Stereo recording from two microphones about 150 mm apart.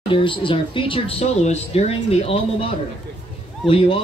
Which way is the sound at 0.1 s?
35° left (ahead or behind).